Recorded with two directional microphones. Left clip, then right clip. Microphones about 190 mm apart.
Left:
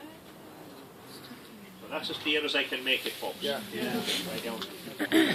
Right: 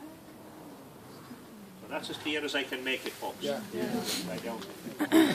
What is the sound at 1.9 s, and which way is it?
Speech, 10° right (ahead or behind).